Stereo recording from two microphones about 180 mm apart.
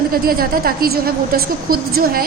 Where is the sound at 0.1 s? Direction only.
55° right (ahead or behind).